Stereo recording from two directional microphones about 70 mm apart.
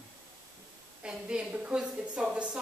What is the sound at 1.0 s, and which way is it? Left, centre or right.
A woman's voice, centre.